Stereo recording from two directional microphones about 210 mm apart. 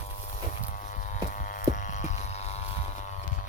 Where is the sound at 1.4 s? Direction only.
40° left (ahead or behind).